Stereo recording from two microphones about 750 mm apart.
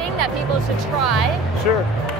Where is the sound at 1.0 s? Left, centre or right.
Right.